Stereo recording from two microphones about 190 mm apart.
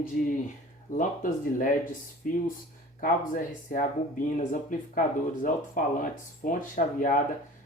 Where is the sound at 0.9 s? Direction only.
40° left (ahead or behind).